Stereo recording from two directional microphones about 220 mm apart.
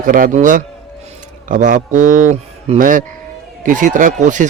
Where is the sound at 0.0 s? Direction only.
40° right (ahead or behind).